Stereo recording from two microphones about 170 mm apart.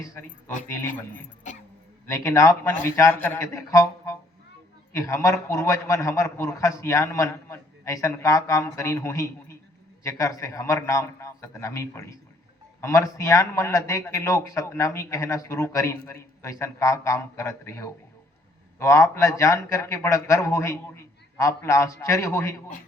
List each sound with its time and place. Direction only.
0.0 s a man's voice: 15° left (ahead or behind)